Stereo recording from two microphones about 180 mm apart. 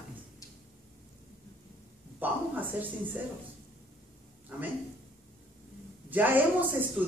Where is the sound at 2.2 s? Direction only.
10° right (ahead or behind).